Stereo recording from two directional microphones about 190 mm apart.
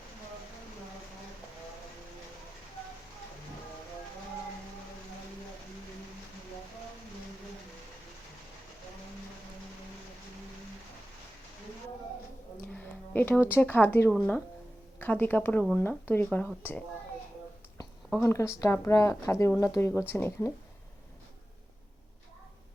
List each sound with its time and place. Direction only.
12.5 s a woman's voice: 10° left (ahead or behind)
18.2 s speech: 15° left (ahead or behind)